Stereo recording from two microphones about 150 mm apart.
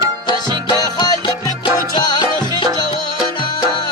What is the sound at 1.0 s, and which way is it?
Music, 30° left (ahead or behind).